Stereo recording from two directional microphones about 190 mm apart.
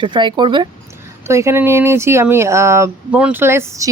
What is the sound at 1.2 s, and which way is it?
Speech, 15° right (ahead or behind).